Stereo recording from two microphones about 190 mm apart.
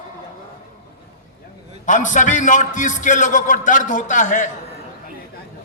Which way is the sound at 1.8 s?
40° left (ahead or behind).